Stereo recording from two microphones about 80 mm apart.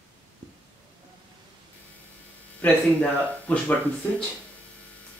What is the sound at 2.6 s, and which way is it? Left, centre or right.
Speech, centre.